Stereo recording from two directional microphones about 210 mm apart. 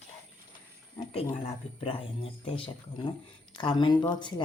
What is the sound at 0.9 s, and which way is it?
Speech, 25° left (ahead or behind).